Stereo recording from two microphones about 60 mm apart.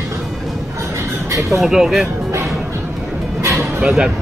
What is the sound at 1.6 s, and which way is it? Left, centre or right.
Speech, centre.